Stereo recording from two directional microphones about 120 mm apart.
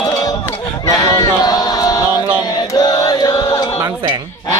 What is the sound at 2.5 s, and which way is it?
Chant, 35° left (ahead or behind).